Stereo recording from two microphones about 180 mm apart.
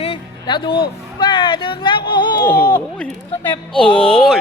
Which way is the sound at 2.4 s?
10° left (ahead or behind).